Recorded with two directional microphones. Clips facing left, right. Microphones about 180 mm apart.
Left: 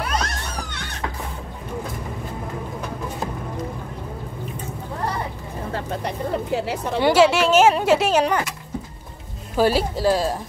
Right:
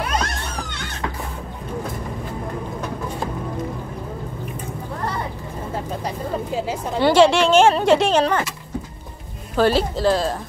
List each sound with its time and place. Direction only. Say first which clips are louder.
5.7 s vehicle: even; 80° left
7.0 s speech: right 2 dB; 10° left (ahead or behind)
9.6 s speech: right 1 dB; 10° left (ahead or behind)